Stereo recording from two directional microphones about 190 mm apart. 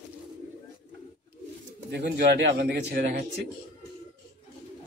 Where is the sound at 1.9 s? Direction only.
60° right (ahead or behind).